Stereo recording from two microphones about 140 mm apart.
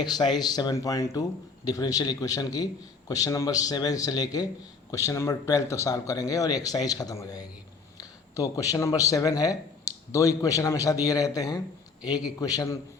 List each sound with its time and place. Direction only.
0.0 s speech: 30° left (ahead or behind)